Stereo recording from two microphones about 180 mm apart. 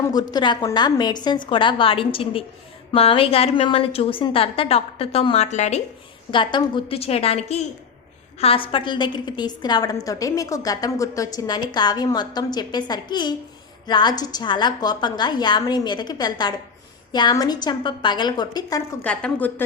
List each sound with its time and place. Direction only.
0.1 s a woman's voice: 20° left (ahead or behind); by 5.8 s 40° left (ahead or behind)
6.3 s a woman's voice: 25° left (ahead or behind)
19.0 s a woman's voice: 5° left (ahead or behind)